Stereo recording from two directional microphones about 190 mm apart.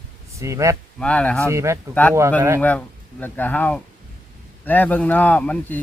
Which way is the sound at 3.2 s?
10° left (ahead or behind).